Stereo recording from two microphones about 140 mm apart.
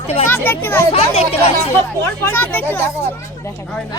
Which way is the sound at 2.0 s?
15° left (ahead or behind).